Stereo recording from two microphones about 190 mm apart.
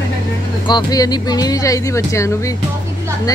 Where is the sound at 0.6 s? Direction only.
20° left (ahead or behind).